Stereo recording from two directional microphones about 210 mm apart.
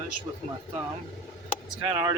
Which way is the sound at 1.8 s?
15° right (ahead or behind).